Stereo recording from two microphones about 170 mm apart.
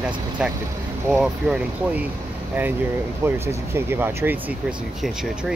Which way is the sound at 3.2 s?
15° right (ahead or behind).